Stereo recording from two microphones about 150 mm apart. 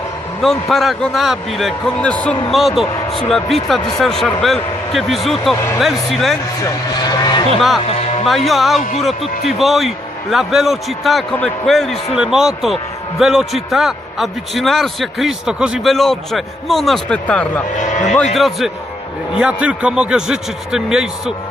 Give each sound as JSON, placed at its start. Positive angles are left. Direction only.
{"t": 0.4, "sound": "a man's voice", "side_deg": 0}
{"t": 6.7, "sound": "speech", "side_deg": 25}
{"t": 7.9, "sound": "music", "side_deg": 45}
{"t": 8.4, "sound": "a man's voice", "side_deg": 0}
{"t": 17.7, "sound": "speech", "side_deg": 55}
{"t": 18.3, "sound": "a man's voice", "side_deg": 0}